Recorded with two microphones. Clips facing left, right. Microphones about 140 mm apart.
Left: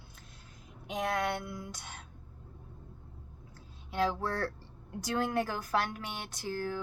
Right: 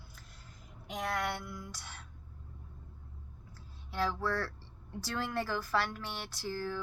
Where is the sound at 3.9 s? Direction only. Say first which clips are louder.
Left 2 dB; 20° left (ahead or behind).